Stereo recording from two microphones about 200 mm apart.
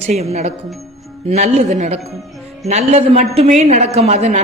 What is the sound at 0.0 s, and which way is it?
A woman's voice, 35° right (ahead or behind).